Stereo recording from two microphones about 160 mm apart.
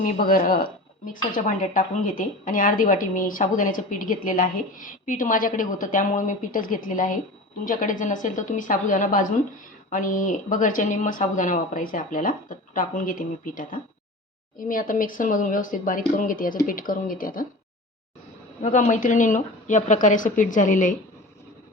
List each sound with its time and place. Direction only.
0.0 s a woman's voice: 60° left (ahead or behind)
18.6 s a woman's voice: 50° left (ahead or behind)